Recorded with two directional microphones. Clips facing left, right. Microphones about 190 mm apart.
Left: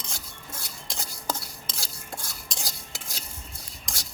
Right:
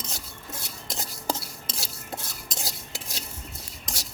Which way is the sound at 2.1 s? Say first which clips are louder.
Right 3 dB; 5° right (ahead or behind).